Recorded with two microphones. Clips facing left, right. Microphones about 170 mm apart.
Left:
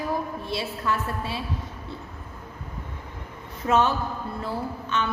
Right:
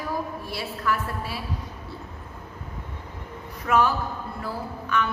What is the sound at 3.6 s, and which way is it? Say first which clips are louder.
A woman's voice: even; 25° left (ahead or behind).